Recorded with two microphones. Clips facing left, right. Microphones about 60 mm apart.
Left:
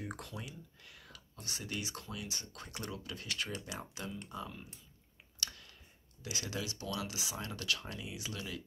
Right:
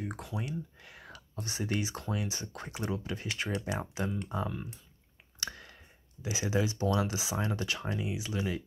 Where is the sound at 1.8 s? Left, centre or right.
Right.